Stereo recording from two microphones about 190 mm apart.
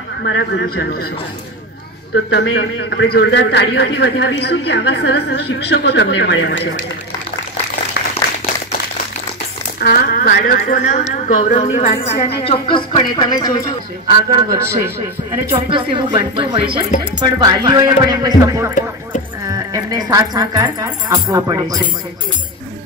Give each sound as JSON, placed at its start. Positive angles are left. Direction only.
{"t": 0.2, "sound": "a man's voice", "side_deg": 65}
{"t": 2.3, "sound": "a man's voice", "side_deg": 70}
{"t": 9.8, "sound": "a woman's voice", "side_deg": 50}
{"t": 14.0, "sound": "speech", "side_deg": -25}
{"t": 14.6, "sound": "a man's voice", "side_deg": -15}
{"t": 15.7, "sound": "speech", "side_deg": -25}